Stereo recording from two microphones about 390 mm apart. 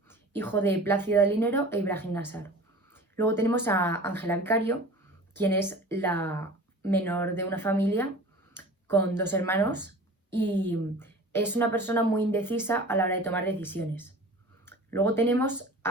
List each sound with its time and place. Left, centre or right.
0.1 s a woman's voice: centre